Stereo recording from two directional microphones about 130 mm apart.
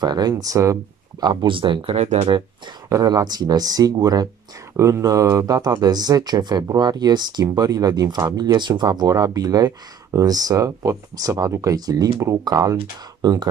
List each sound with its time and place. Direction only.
0.0 s speech: 30° right (ahead or behind)
1.2 s speech: 40° right (ahead or behind); by 2.2 s 60° right (ahead or behind)
2.9 s speech: 30° right (ahead or behind)